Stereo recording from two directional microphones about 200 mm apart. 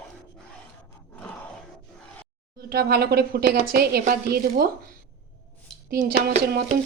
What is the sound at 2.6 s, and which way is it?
Speech, 50° right (ahead or behind).